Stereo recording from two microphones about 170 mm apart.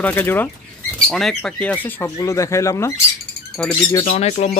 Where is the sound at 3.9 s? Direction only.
35° left (ahead or behind).